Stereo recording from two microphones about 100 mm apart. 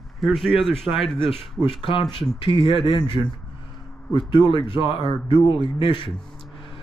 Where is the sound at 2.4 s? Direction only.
60° left (ahead or behind).